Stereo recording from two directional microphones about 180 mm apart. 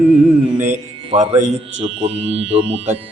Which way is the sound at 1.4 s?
35° right (ahead or behind).